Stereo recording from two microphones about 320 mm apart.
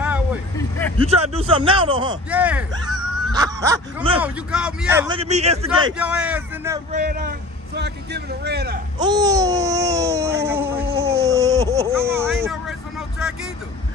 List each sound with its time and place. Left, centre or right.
0.0 s vehicle: centre
0.9 s babbling: centre
2.3 s speech: centre
4.2 s babbling: centre
5.9 s speech: centre
6.9 s a man's voice: right
8.9 s babbling: centre
11.1 s a sound: centre